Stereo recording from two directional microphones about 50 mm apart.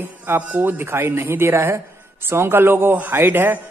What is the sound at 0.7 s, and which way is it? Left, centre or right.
A man's voice, right.